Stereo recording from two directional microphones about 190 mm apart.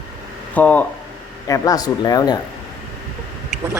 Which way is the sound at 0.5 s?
10° left (ahead or behind).